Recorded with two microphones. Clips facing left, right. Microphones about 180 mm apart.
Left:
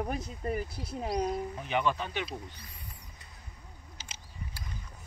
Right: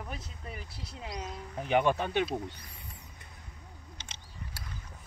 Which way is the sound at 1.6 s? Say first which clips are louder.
Right 6 dB; 50° right (ahead or behind).